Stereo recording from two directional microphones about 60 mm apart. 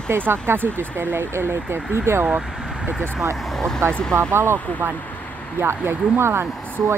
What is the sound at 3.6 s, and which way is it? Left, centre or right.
Speech, centre.